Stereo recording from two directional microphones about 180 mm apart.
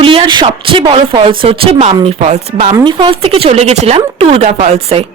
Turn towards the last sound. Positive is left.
turn(degrees=-35)  # may be behind; listen again after turning